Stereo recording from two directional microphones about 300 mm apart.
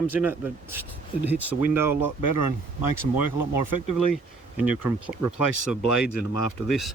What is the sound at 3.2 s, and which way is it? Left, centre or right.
Speech, left.